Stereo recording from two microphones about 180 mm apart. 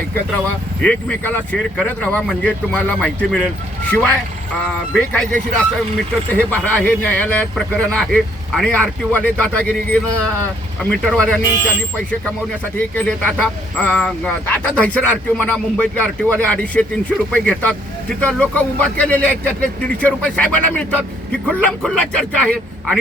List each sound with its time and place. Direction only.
0.8 s a man's voice: 5° left (ahead or behind)
12.7 s a man's voice: 10° left (ahead or behind)